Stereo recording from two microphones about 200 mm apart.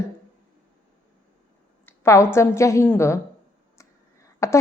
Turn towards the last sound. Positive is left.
turn(degrees=15)  # may be behind; listen again after turning